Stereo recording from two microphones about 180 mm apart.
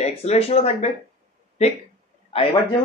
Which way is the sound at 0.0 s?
35° left (ahead or behind).